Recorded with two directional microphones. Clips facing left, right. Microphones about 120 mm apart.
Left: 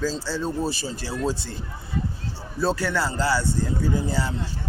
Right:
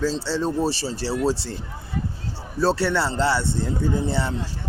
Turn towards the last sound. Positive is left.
turn(degrees=-25)  # may be behind; listen again after turning